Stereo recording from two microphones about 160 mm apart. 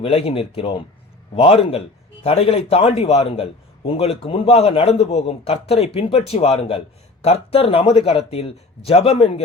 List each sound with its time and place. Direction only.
0.0 s a man's voice: 35° left (ahead or behind)